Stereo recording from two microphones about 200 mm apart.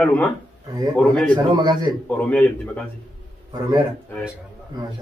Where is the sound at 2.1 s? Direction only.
5° left (ahead or behind).